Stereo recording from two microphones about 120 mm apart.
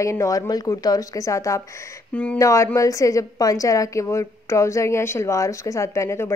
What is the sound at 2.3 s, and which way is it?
A woman's voice, 25° left (ahead or behind).